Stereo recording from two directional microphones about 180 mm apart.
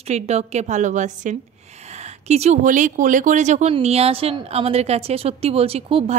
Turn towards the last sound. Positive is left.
turn(degrees=-35)  # may be behind; listen again after turning